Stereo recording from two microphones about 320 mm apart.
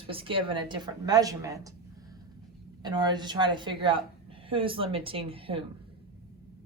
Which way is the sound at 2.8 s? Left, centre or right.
Centre.